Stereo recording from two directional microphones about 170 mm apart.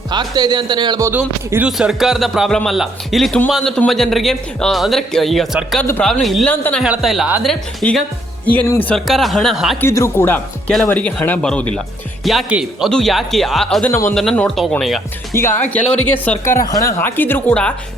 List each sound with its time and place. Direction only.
0.1 s a man's voice: 25° right (ahead or behind)
1.1 s speech: 10° right (ahead or behind); by 6.8 s 10° left (ahead or behind)
6.8 s speech: 5° right (ahead or behind)
8.5 s speech: 15° left (ahead or behind)
9.8 s speech: 15° left (ahead or behind)
15.3 s speech: 15° left (ahead or behind)
16.3 s speech: 50° left (ahead or behind)
16.6 s speech: 20° left (ahead or behind)